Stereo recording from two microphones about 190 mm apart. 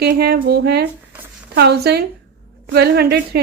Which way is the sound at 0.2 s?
60° right (ahead or behind).